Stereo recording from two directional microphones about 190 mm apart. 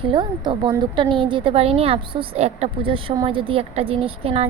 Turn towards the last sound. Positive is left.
turn(degrees=-30)  # may be behind; listen again after turning